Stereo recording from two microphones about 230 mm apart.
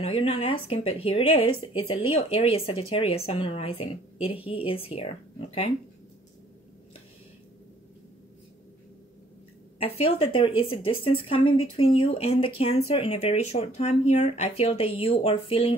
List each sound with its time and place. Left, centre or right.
0.0 s a woman's voice: left
9.8 s a woman's voice: left